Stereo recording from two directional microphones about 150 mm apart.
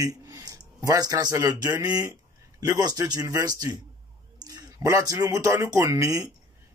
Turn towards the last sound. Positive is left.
turn(degrees=-20)  # may be behind; listen again after turning